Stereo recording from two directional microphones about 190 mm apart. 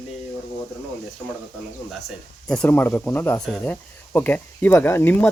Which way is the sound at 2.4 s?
5° left (ahead or behind).